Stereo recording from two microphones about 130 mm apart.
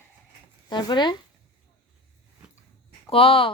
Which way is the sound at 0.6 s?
35° left (ahead or behind).